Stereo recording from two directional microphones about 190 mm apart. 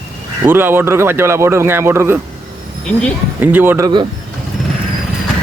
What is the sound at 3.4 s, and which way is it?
Speech, 10° right (ahead or behind).